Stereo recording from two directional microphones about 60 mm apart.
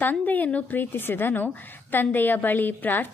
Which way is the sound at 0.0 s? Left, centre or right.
Left.